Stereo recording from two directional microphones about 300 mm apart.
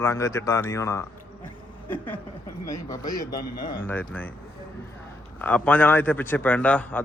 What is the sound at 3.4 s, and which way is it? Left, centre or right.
Speech, left.